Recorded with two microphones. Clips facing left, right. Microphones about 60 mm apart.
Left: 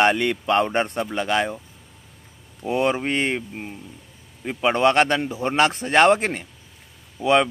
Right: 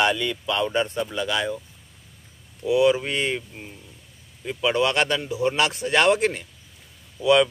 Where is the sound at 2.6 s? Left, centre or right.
Left.